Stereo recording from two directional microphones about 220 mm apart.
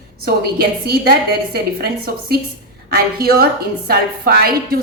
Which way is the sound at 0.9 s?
45° right (ahead or behind).